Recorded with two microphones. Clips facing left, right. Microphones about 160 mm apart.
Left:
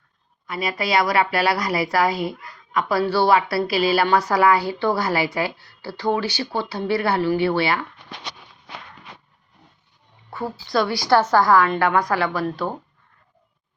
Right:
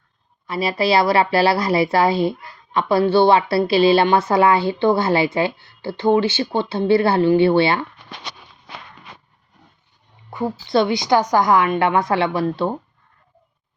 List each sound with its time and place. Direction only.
0.4 s a woman's voice: 30° right (ahead or behind)
10.2 s a woman's voice: 15° right (ahead or behind)